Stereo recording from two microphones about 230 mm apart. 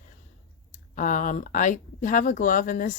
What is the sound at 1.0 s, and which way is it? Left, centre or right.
Speech, left.